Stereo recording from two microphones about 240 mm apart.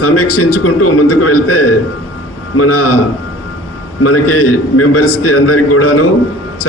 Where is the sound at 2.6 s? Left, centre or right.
Left.